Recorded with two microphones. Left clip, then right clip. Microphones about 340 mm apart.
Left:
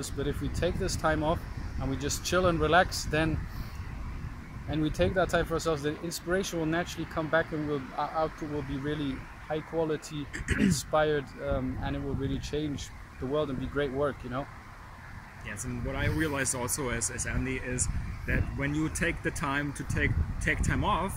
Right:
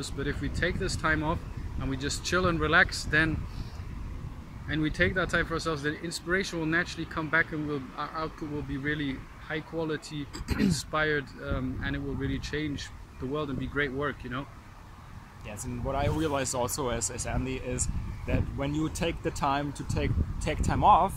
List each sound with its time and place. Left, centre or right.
0.0 s speech: centre
4.6 s speech: centre
10.3 s speech: centre
10.7 s speech: centre
15.4 s speech: centre